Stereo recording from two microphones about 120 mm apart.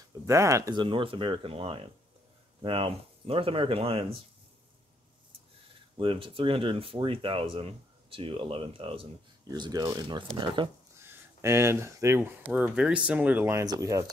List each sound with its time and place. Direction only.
0.3 s speech: 25° right (ahead or behind)
0.7 s speech: 45° right (ahead or behind)
5.9 s speech: 50° right (ahead or behind)
9.5 s speech: 30° right (ahead or behind)
11.0 s speech: 20° right (ahead or behind)